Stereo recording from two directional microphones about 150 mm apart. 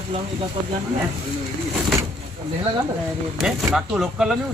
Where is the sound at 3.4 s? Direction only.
5° right (ahead or behind).